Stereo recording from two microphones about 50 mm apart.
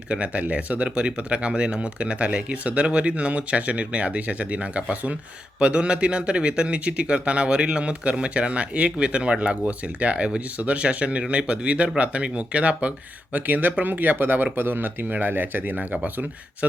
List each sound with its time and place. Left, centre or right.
0.1 s speech: right